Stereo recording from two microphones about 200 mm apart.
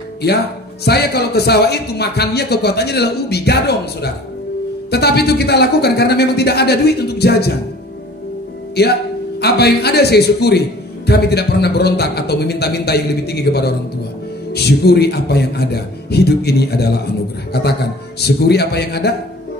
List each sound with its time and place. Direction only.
0.8 s a man's voice: 55° left (ahead or behind)
8.8 s a man's voice: 55° left (ahead or behind)